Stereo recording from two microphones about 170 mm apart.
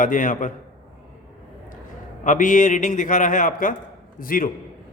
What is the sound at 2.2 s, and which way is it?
A man's voice, 50° left (ahead or behind).